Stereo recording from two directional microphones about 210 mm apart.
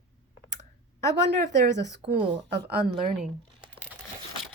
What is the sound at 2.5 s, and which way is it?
Speech, 50° right (ahead or behind).